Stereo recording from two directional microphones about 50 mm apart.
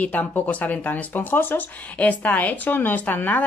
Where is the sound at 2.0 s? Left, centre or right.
Left.